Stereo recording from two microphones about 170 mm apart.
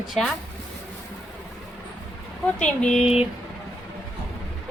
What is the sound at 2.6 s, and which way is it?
Speech, 5° left (ahead or behind).